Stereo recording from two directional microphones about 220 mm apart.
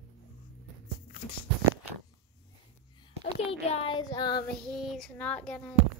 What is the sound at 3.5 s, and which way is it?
Speech, 25° left (ahead or behind).